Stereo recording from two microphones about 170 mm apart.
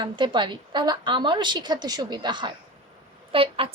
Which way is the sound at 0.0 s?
25° right (ahead or behind).